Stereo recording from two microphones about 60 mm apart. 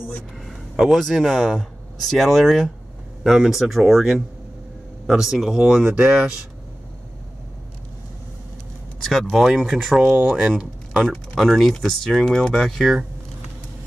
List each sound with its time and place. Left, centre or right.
0.4 s speech: centre
9.0 s speech: centre
10.1 s speech: centre
10.6 s a sound: centre
11.1 s speech: centre